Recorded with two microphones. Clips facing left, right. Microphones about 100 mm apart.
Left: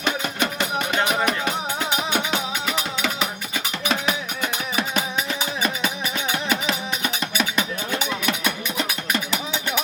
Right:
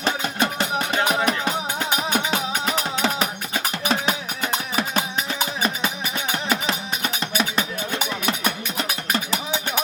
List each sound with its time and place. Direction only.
0.0 s music: 35° right (ahead or behind)